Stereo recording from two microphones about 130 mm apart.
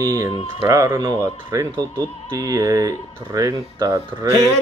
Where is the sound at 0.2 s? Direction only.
25° right (ahead or behind).